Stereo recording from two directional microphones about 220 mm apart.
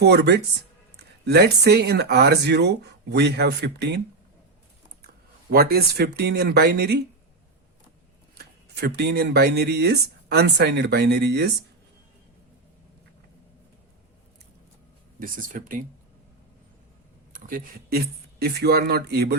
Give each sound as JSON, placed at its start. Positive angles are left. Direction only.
{"t": 0.0, "sound": "speech", "side_deg": -50}
{"t": 5.5, "sound": "speech", "side_deg": -45}
{"t": 8.4, "sound": "speech", "side_deg": -45}
{"t": 15.2, "sound": "speech", "side_deg": -40}
{"t": 17.3, "sound": "speech", "side_deg": -40}